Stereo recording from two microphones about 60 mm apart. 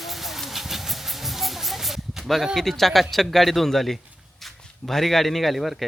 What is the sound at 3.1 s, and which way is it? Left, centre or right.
A man's voice, centre.